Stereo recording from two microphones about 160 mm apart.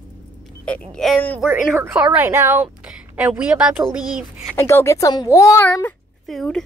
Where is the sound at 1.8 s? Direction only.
10° right (ahead or behind).